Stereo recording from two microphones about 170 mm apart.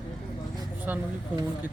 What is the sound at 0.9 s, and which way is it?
Speech, 10° right (ahead or behind).